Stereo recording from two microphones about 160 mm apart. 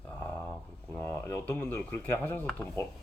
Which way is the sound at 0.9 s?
10° left (ahead or behind).